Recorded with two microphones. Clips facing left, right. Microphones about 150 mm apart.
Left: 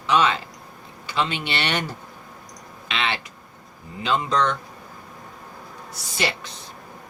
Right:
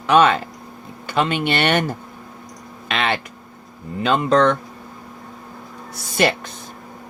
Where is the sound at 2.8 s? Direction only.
50° right (ahead or behind).